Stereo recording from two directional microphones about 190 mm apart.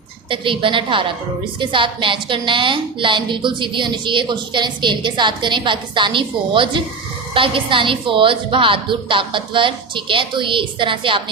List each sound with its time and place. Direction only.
0.3 s a woman's voice: 25° right (ahead or behind)